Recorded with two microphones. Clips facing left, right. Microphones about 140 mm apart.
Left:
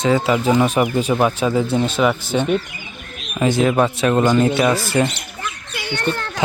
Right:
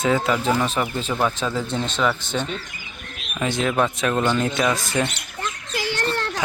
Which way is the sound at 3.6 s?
5° left (ahead or behind).